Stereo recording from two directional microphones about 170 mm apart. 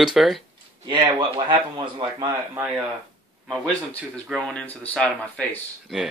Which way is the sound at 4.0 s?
Centre (ahead or behind).